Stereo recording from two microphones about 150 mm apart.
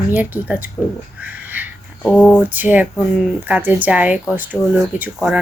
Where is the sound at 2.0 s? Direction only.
10° left (ahead or behind).